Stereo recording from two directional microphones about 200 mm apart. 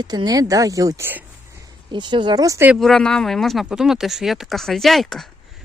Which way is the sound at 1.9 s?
25° right (ahead or behind).